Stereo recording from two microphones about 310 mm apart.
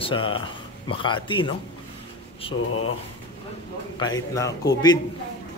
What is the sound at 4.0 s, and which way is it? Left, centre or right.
A man's voice, centre.